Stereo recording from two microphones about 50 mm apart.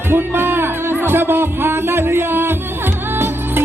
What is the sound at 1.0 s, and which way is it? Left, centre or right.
Speech, right.